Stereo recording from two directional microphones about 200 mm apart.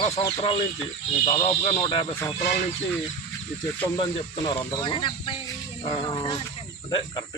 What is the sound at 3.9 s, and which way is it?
Speech, 20° left (ahead or behind).